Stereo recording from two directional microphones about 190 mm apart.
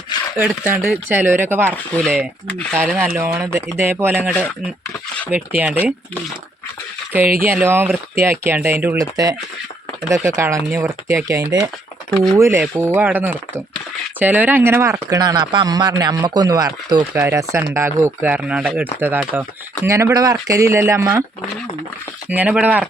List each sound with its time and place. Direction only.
0.3 s speech: 10° right (ahead or behind)
1.7 s speech: 5° left (ahead or behind)
3.2 s speech: 15° right (ahead or behind)
7.4 s speech: 10° right (ahead or behind)
22.3 s speech: 5° right (ahead or behind)